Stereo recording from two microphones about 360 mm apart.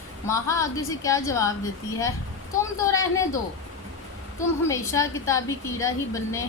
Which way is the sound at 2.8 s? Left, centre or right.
Centre.